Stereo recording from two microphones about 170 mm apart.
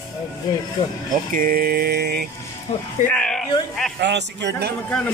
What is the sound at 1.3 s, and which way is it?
Mantra, 60° right (ahead or behind).